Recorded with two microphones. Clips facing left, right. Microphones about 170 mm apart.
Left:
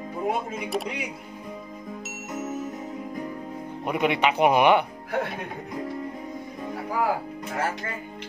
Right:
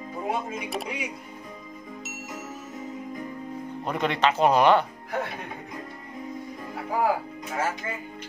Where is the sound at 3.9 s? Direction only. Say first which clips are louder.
Left 1 dB; 15° left (ahead or behind).